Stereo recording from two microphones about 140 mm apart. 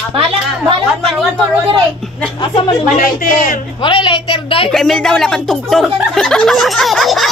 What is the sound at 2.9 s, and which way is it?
Speech, 85° left.